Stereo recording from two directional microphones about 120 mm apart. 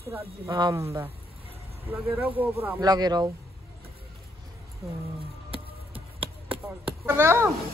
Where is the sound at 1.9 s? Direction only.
15° right (ahead or behind).